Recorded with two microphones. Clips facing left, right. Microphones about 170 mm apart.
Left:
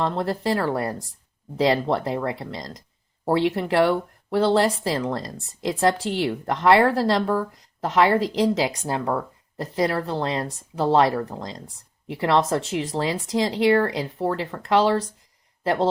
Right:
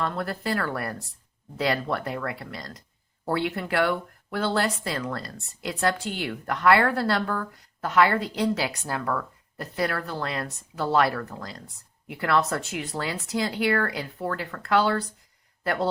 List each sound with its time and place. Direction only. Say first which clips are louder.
0.0 s a woman's voice: left 5 dB; 25° left (ahead or behind)